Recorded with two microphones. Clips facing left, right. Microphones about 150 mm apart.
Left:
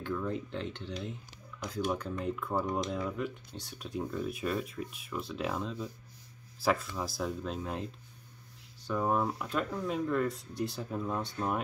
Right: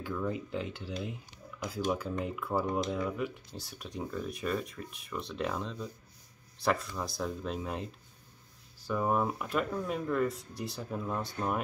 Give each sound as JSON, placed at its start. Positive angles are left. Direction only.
{"t": 0.0, "sound": "speech", "side_deg": -5}
{"t": 2.2, "sound": "speech", "side_deg": -5}